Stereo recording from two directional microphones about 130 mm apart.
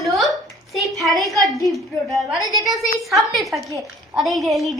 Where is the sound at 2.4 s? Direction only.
30° left (ahead or behind).